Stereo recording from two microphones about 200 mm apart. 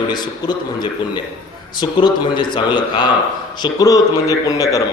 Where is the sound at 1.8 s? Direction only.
20° left (ahead or behind).